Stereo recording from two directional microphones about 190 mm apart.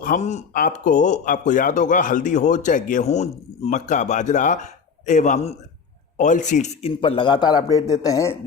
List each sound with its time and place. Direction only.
0.0 s speech: 40° left (ahead or behind); by 8.4 s 15° left (ahead or behind)